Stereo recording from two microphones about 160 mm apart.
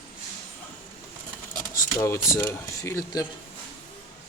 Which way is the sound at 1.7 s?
20° left (ahead or behind).